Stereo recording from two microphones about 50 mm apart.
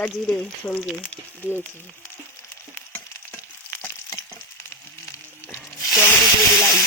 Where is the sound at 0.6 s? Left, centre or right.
Left.